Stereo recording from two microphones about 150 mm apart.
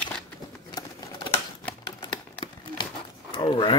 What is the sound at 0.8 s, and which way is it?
Patter, 30° left (ahead or behind).